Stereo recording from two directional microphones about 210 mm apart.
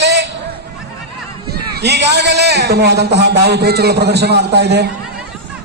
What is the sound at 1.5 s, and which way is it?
A man's voice, 50° right (ahead or behind).